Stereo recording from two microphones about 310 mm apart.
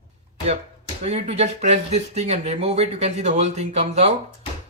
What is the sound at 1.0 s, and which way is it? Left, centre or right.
Speech, right.